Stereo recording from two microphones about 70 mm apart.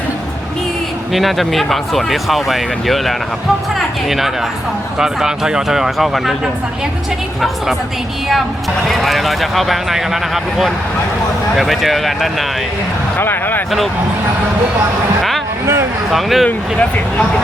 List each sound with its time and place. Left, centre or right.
1.1 s speech: centre
8.9 s speech: centre
13.1 s speech: left
15.6 s a sound: right
16.0 s speech: centre
16.5 s speech: left